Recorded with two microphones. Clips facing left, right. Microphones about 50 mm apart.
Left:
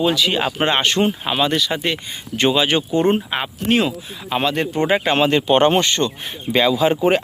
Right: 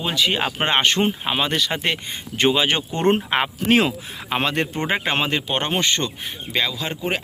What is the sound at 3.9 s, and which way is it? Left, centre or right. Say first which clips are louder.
Speech: left 2 dB; right.